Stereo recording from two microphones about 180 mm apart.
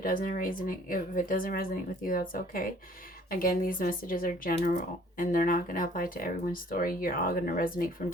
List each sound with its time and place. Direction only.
0.0 s speech: 50° left (ahead or behind)